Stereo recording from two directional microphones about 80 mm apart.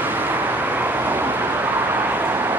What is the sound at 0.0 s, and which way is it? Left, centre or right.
Vehicle, right.